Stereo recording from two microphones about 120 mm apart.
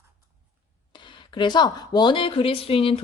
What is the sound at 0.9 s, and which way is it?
Speech, 40° left (ahead or behind).